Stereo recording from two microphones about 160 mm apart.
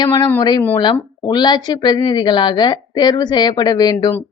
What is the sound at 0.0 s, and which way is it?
Speech, 30° left (ahead or behind).